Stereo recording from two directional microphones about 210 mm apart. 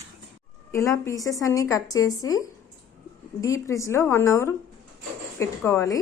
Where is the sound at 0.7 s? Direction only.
15° left (ahead or behind).